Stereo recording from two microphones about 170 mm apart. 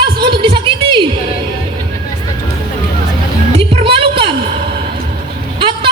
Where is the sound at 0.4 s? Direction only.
30° right (ahead or behind).